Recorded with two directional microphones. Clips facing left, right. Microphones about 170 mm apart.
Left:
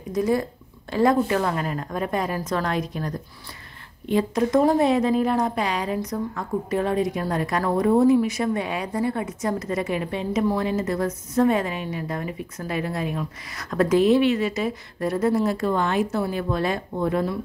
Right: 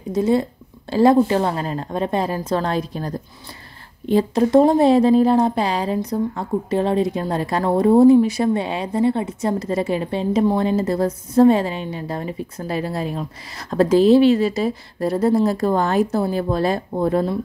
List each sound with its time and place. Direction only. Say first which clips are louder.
0.1 s a woman's voice: right 4 dB; 25° right (ahead or behind)